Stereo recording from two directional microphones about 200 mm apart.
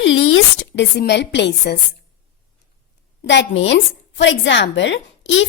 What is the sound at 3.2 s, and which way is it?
A woman's voice, 60° left (ahead or behind).